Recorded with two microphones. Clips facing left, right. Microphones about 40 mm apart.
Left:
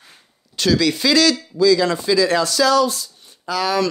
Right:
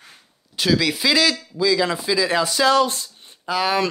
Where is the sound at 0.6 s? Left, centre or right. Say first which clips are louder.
Left 2 dB; centre.